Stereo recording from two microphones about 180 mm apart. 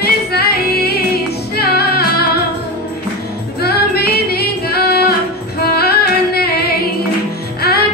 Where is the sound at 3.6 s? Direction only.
60° left (ahead or behind).